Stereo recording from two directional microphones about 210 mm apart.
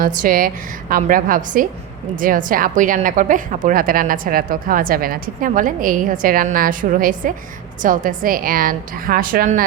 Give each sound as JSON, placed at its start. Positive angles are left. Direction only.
{"t": 0.0, "sound": "a woman's voice", "side_deg": -40}